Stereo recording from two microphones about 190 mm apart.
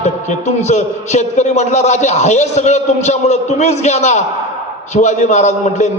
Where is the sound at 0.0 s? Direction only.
35° left (ahead or behind).